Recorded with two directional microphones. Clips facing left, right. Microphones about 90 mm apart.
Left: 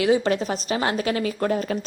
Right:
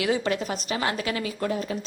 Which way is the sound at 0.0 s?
30° left (ahead or behind).